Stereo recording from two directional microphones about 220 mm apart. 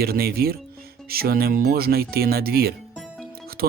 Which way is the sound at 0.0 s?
45° right (ahead or behind).